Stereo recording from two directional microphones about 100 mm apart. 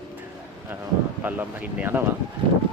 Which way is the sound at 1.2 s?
15° right (ahead or behind).